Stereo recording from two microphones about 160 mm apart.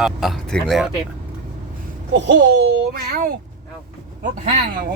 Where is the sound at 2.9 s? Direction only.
70° right (ahead or behind).